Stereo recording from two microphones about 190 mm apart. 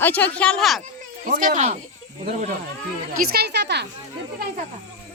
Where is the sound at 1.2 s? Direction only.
45° right (ahead or behind).